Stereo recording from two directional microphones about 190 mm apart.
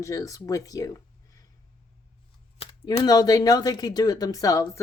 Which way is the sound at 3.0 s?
20° left (ahead or behind).